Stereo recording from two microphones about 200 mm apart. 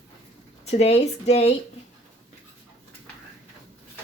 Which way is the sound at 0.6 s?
30° left (ahead or behind).